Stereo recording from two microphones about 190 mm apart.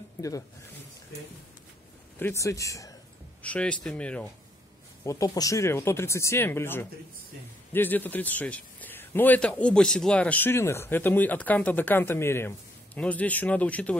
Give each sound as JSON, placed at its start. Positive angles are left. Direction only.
{"t": 2.1, "sound": "speech", "side_deg": 15}
{"t": 3.4, "sound": "speech", "side_deg": 5}
{"t": 5.0, "sound": "speech", "side_deg": 20}